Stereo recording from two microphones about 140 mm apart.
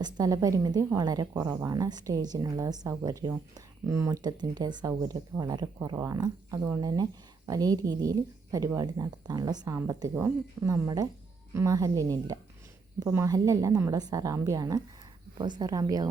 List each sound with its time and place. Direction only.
0.0 s a woman's voice: 25° right (ahead or behind)